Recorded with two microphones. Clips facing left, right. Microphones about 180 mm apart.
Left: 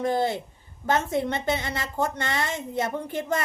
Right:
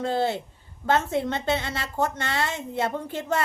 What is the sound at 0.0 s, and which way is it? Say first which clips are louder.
A woman's voice: even; 15° left (ahead or behind).